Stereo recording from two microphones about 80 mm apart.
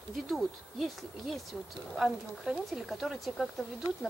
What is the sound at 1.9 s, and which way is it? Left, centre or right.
Speech, centre.